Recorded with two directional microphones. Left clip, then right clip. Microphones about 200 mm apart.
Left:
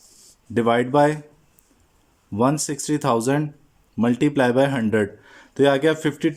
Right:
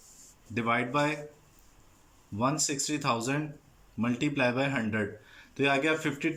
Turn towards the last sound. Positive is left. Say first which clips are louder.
# left 8 dB
turn(degrees=30)  # may be behind; listen again after turning